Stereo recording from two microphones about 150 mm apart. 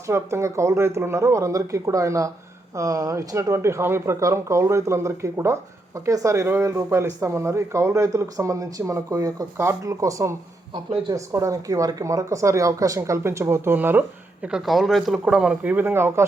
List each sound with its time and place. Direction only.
0.1 s speech: 20° right (ahead or behind)